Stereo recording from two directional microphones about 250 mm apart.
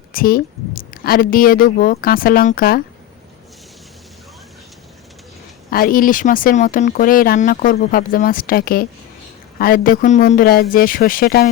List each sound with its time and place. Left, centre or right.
0.1 s speech: left
5.7 s speech: left